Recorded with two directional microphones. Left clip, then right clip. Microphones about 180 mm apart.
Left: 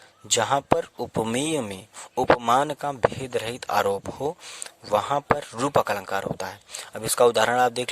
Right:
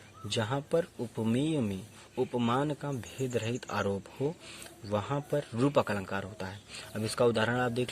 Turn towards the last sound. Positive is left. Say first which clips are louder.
# left 9 dB
turn(degrees=50)  # may be behind; listen again after turning